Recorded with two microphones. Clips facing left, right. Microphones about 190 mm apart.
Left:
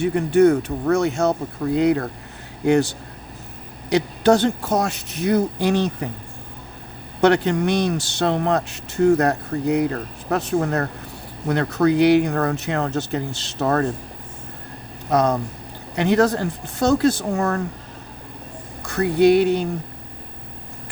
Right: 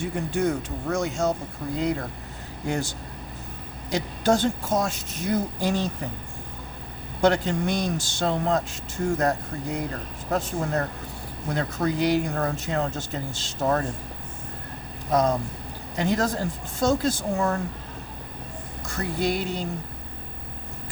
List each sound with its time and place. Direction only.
0.0 s speech: 65° left (ahead or behind)
7.2 s speech: 70° left (ahead or behind)
16.0 s speech: 65° left (ahead or behind)
18.9 s speech: 65° left (ahead or behind)